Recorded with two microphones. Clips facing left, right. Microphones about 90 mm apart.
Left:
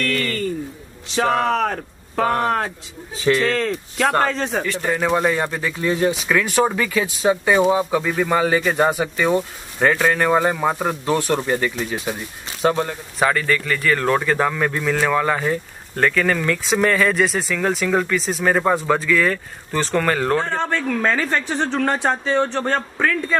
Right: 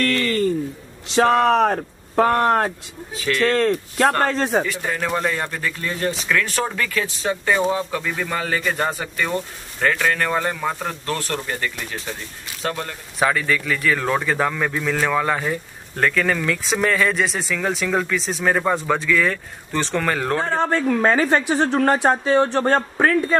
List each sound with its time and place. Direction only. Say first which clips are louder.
1.1 s speech: right 3 dB; centre (ahead or behind)
1.6 s speech: right 4 dB; 15° right (ahead or behind)
3.4 s a man's voice: right 3 dB; centre (ahead or behind)
13.2 s a woman's voice: left 1 dB; centre (ahead or behind)
22.7 s a man's voice: right 3 dB; 25° right (ahead or behind)